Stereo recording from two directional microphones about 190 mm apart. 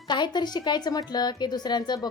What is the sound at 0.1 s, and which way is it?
Speech, 25° left (ahead or behind).